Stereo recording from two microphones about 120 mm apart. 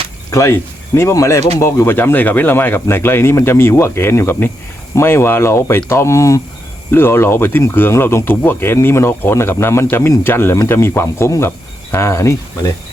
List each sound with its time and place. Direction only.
0.3 s speech: 25° left (ahead or behind)